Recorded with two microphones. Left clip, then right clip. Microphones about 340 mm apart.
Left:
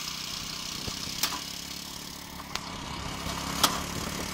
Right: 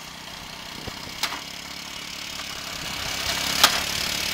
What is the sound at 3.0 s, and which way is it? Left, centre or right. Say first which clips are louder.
Vehicle: right 10 dB; right.